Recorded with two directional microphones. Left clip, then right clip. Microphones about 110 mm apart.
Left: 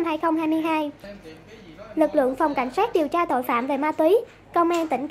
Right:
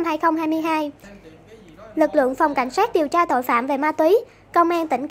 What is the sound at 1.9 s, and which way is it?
A woman's voice, 30° right (ahead or behind).